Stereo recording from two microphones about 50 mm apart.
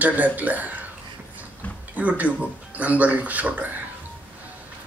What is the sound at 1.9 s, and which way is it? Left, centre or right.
A man's voice, right.